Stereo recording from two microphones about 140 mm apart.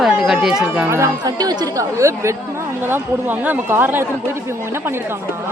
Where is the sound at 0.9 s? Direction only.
25° right (ahead or behind).